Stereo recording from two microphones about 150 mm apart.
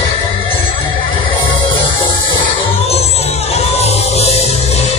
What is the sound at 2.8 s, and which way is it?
Music, 45° left (ahead or behind).